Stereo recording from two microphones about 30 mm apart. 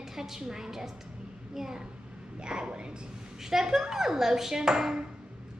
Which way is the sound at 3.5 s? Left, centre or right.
Centre.